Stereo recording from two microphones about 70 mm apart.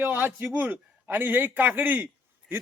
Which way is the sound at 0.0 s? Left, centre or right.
Right.